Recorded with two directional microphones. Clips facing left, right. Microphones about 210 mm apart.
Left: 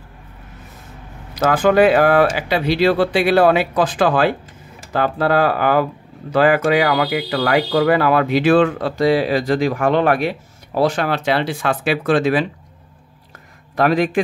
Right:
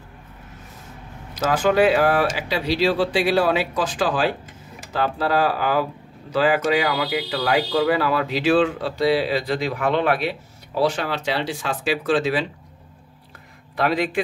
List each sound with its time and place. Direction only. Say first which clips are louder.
1.4 s speech: left 4 dB; 55° left (ahead or behind)
13.7 s a man's voice: left 5 dB; 45° left (ahead or behind)